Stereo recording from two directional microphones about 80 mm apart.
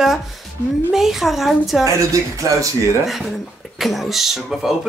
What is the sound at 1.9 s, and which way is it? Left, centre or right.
Speech, right.